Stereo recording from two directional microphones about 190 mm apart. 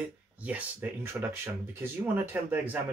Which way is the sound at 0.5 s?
10° right (ahead or behind).